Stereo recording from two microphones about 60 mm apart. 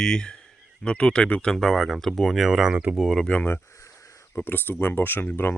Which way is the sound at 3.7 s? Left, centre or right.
Left.